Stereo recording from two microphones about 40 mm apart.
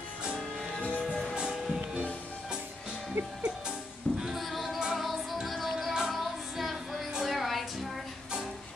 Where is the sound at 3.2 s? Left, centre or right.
Right.